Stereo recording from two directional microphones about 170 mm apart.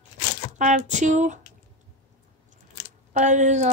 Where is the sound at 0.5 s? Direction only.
45° right (ahead or behind).